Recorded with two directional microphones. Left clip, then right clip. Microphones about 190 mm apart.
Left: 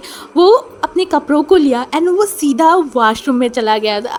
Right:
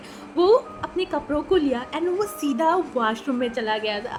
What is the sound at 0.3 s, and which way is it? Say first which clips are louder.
A woman's voice: left 9 dB; 50° left (ahead or behind).